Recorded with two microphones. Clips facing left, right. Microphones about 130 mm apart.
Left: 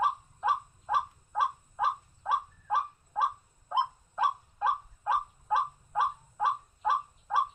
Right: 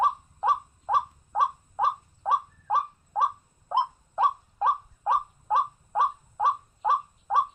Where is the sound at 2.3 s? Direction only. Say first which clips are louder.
Right 4 dB; 30° right (ahead or behind).